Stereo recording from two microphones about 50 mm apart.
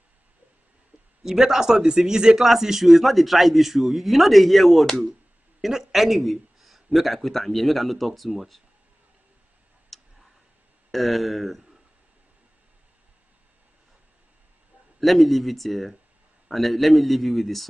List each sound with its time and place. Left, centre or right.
1.2 s speech: centre
9.9 s tick: centre
10.9 s speech: centre
15.0 s speech: centre